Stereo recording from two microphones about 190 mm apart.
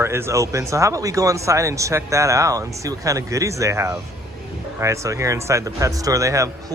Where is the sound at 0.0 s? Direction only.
15° right (ahead or behind).